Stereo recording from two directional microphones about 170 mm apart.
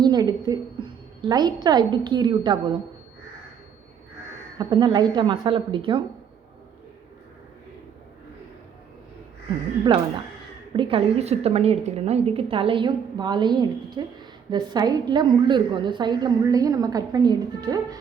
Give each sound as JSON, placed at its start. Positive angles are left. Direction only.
{"t": 0.0, "sound": "a woman's voice", "side_deg": -25}
{"t": 4.5, "sound": "a woman's voice", "side_deg": -25}
{"t": 10.8, "sound": "a woman's voice", "side_deg": -30}